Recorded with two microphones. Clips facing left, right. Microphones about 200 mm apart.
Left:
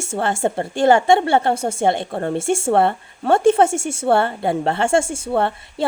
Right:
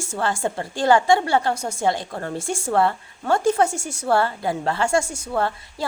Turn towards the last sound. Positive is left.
turn(degrees=25)  # may be behind; listen again after turning